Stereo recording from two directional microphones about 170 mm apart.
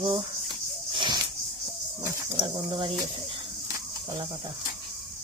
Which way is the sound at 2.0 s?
25° right (ahead or behind).